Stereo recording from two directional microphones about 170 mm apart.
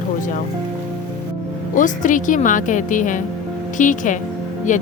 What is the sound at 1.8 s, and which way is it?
Speech, 50° left (ahead or behind).